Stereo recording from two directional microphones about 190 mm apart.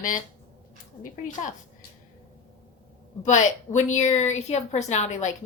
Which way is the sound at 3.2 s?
40° left (ahead or behind).